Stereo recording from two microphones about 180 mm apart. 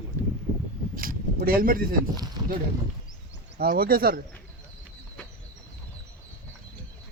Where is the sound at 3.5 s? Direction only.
55° right (ahead or behind).